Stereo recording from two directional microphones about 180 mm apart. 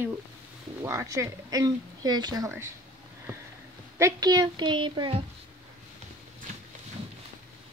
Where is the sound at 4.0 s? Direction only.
20° right (ahead or behind).